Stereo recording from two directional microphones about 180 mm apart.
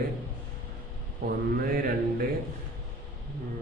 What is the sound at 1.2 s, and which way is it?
A man's voice, 60° right (ahead or behind).